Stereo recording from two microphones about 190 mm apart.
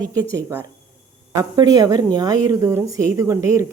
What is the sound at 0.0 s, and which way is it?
A woman's voice, 20° right (ahead or behind).